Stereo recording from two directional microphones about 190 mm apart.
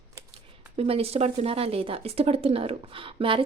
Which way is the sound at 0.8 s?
30° right (ahead or behind).